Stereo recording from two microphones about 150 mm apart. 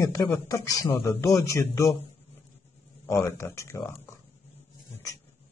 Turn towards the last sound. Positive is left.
turn(degrees=20)  # may be behind; listen again after turning